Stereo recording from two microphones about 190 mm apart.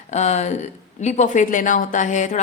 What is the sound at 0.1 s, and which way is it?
A woman's voice, 35° left (ahead or behind).